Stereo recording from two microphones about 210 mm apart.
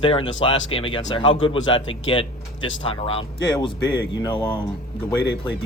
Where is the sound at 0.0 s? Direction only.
25° left (ahead or behind).